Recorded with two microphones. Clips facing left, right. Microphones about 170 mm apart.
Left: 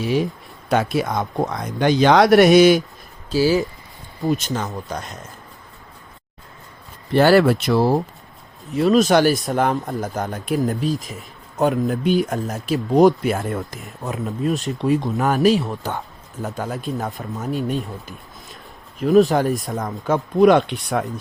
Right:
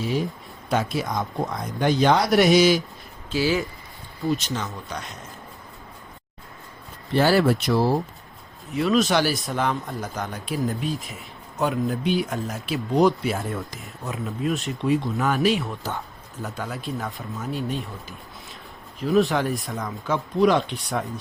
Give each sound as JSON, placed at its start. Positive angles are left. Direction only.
{"t": 0.0, "sound": "speech", "side_deg": 75}
{"t": 2.5, "sound": "speech", "side_deg": 55}
{"t": 3.3, "sound": "speech", "side_deg": 40}
{"t": 7.2, "sound": "speech", "side_deg": 70}
{"t": 8.7, "sound": "speech", "side_deg": 40}
{"t": 10.8, "sound": "speech", "side_deg": 40}
{"t": 16.6, "sound": "speech", "side_deg": 45}
{"t": 19.0, "sound": "speech", "side_deg": 40}